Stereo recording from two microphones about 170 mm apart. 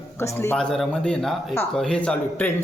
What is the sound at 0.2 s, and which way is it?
A man's voice, 15° left (ahead or behind).